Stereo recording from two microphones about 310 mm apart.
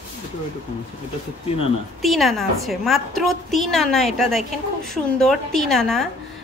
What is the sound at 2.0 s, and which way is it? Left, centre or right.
A woman's voice, centre.